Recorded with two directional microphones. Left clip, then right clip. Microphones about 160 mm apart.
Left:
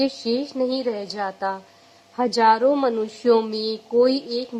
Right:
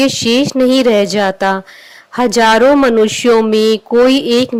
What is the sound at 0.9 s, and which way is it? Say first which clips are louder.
A woman's voice: right 16 dB; 45° right (ahead or behind).